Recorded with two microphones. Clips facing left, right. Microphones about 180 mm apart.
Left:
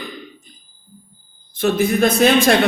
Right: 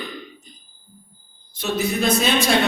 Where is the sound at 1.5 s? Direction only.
50° left (ahead or behind).